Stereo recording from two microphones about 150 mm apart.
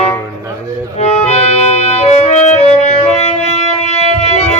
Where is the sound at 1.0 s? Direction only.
45° left (ahead or behind).